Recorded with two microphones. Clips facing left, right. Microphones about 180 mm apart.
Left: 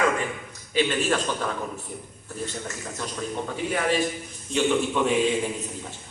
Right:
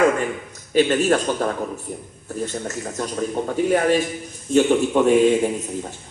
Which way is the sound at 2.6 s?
45° right (ahead or behind).